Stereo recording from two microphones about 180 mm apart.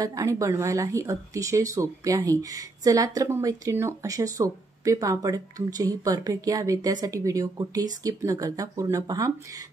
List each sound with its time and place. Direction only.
0.0 s speech: 20° right (ahead or behind)